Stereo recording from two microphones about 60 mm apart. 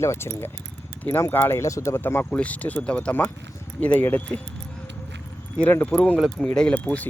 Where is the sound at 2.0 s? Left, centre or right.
Left.